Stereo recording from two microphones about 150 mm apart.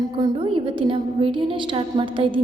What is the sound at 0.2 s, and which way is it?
A woman's voice, 35° right (ahead or behind).